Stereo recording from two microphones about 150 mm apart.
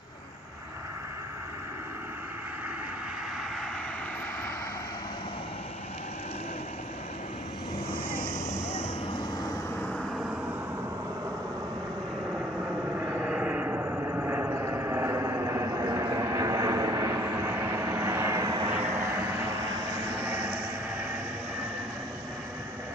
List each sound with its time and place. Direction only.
9.9 s vehicle: centre (ahead or behind)
13.0 s a sound: 10° right (ahead or behind)
18.7 s vehicle: 15° right (ahead or behind)
20.1 s vehicle: 10° right (ahead or behind)